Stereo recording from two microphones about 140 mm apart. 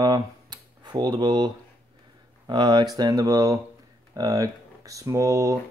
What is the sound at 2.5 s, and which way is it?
Speech, 30° right (ahead or behind).